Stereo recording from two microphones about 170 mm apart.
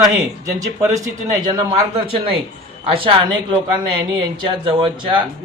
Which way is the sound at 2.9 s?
30° right (ahead or behind).